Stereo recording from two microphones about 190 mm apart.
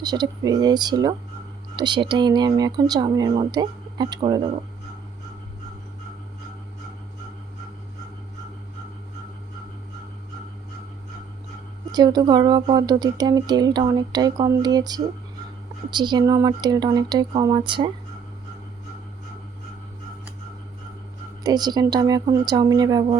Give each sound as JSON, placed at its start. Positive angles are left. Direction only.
{"t": 0.0, "sound": "speech", "side_deg": -20}
{"t": 11.9, "sound": "speech", "side_deg": -20}
{"t": 21.4, "sound": "speech", "side_deg": -20}